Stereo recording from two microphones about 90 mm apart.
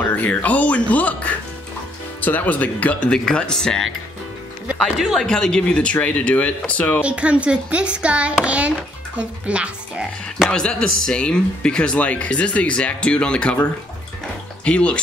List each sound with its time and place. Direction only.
0.0 s speech: 15° left (ahead or behind)
4.9 s speech: centre (ahead or behind); by 7.0 s 15° left (ahead or behind)
7.0 s a child's voice: 15° right (ahead or behind)
10.5 s speech: 10° left (ahead or behind)